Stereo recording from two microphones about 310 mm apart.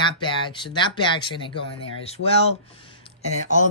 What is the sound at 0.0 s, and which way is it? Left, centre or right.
Speech, centre.